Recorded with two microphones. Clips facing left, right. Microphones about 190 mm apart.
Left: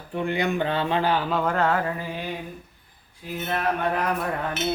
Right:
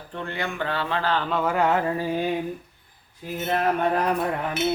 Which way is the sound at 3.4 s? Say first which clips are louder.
Right 3 dB; 35° right (ahead or behind).